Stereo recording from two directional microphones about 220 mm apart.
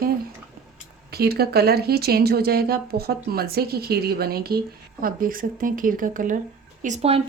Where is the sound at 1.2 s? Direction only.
45° right (ahead or behind).